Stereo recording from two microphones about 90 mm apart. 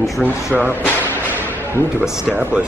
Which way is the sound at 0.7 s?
20° left (ahead or behind).